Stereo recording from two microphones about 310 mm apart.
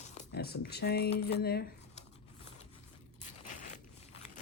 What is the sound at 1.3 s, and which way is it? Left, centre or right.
Speech, left.